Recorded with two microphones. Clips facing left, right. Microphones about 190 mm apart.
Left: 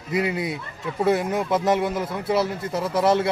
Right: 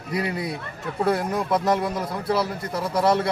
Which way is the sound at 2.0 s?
25° left (ahead or behind).